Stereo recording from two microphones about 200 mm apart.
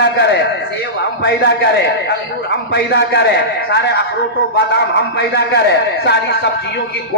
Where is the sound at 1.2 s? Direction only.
55° left (ahead or behind).